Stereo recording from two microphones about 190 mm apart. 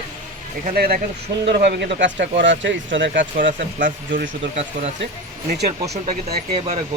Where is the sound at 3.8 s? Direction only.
45° right (ahead or behind).